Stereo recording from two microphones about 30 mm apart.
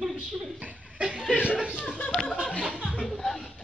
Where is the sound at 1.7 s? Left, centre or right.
Left.